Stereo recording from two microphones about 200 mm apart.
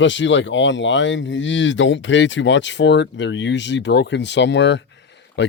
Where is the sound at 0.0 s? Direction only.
65° left (ahead or behind).